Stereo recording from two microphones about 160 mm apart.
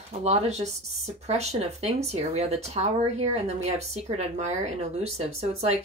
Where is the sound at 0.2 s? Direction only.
40° right (ahead or behind).